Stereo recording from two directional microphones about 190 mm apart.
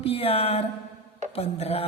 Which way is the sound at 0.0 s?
30° left (ahead or behind).